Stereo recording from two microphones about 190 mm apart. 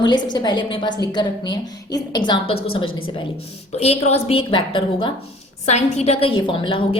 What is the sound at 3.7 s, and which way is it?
A woman's voice, 35° left (ahead or behind).